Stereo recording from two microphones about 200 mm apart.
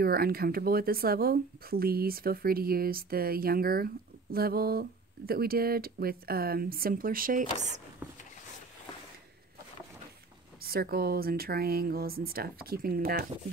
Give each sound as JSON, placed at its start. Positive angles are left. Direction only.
{"t": 0.0, "sound": "speech", "side_deg": -50}
{"t": 10.6, "sound": "speech", "side_deg": -50}